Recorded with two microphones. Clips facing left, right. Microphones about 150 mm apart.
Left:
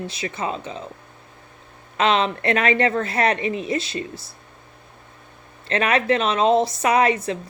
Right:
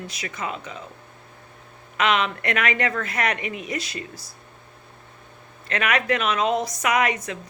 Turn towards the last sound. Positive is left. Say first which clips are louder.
# left 4 dB
turn(degrees=30)  # may be behind; listen again after turning